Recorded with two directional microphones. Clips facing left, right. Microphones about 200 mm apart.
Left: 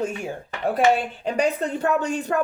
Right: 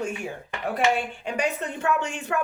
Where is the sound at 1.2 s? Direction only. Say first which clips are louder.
Left 7 dB; 35° left (ahead or behind).